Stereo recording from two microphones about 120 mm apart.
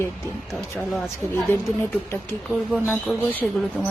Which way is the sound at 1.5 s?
20° left (ahead or behind).